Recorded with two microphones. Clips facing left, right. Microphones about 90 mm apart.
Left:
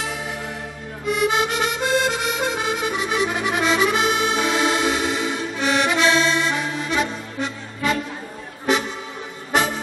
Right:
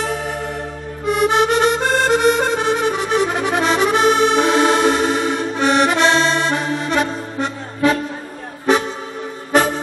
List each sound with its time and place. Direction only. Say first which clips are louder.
0.0 s music: right 6 dB; 50° right (ahead or behind)
1.0 s accordion: right 5 dB; 50° right (ahead or behind)